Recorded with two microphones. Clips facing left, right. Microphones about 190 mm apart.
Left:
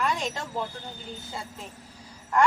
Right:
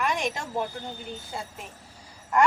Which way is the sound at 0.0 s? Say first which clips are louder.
Right 1 dB; 15° right (ahead or behind).